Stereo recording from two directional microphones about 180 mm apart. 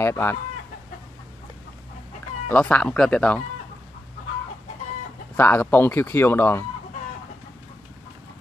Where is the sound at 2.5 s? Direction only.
5° left (ahead or behind).